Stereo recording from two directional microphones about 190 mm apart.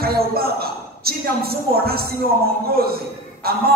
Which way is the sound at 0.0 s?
55° right (ahead or behind).